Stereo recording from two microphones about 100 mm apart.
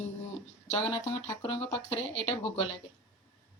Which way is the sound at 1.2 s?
70° left (ahead or behind).